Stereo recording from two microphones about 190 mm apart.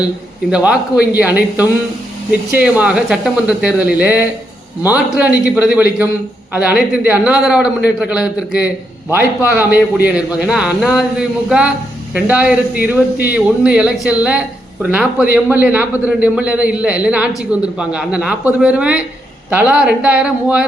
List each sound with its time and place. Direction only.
0.5 s a man's voice: 5° right (ahead or behind)